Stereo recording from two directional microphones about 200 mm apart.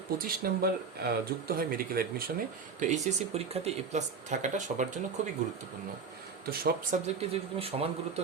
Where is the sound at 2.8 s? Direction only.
35° right (ahead or behind).